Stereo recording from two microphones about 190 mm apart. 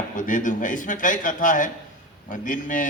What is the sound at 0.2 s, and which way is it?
A man's voice, 45° left (ahead or behind).